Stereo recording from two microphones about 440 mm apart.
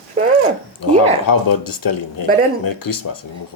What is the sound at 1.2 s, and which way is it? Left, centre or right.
Speech, left.